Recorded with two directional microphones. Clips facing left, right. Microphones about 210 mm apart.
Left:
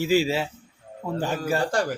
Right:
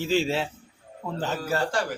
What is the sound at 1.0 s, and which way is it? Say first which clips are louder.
Speech: left 3 dB; 10° left (ahead or behind).